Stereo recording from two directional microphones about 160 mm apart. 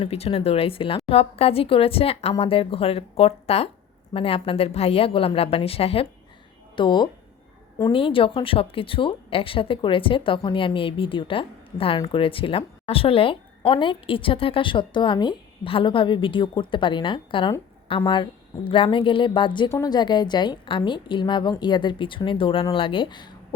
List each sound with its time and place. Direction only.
0.0 s a woman's voice: 40° left (ahead or behind)